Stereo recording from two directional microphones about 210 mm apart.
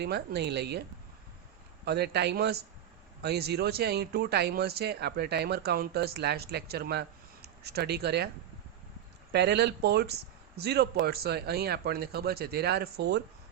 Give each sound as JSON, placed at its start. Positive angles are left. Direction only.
{"t": 0.0, "sound": "a man's voice", "side_deg": -50}
{"t": 9.3, "sound": "a man's voice", "side_deg": -55}